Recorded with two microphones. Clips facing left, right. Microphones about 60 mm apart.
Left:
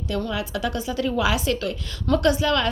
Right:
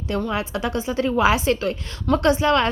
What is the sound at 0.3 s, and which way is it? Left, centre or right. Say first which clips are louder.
A woman's voice: right 2 dB; right.